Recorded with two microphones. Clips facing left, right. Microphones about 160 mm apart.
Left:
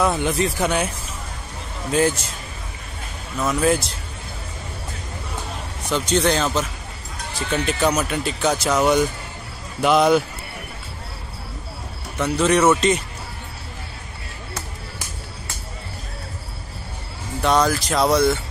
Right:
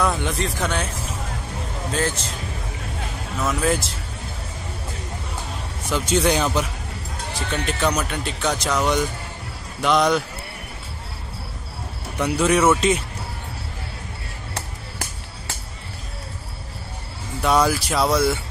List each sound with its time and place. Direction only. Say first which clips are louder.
0.0 s speech: left 3 dB; 5° left (ahead or behind)
1.9 s a man's voice: left 6 dB; 10° left (ahead or behind)
3.4 s speech: left 3 dB; centre (ahead or behind)
5.9 s speech: left 1 dB; 5° right (ahead or behind)
7.5 s speech: left 3 dB; 5° left (ahead or behind)
12.2 s speech: left 1 dB; 10° right (ahead or behind)
17.4 s speech: even; 5° right (ahead or behind)